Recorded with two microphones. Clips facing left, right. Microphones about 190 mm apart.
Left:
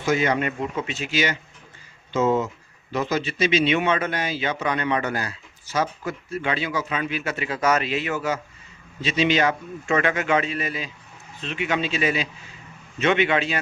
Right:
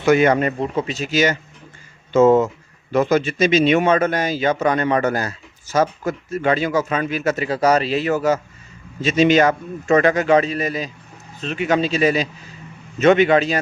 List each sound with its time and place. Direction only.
0.0 s speech: 60° right (ahead or behind)
0.3 s a man's voice: 35° right (ahead or behind)